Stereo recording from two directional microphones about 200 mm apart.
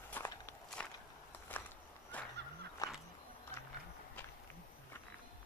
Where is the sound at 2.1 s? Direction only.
10° left (ahead or behind).